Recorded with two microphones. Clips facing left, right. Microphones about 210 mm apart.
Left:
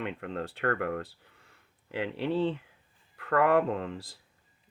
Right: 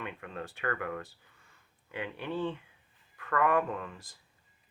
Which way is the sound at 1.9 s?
75° left (ahead or behind).